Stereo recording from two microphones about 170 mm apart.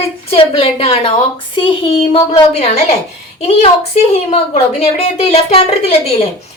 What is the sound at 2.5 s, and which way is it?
A woman's voice, 40° left (ahead or behind).